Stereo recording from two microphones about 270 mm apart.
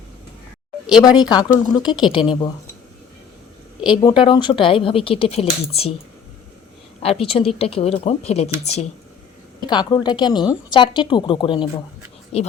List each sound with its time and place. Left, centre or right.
0.9 s speech: centre
3.8 s speech: centre
7.0 s speech: left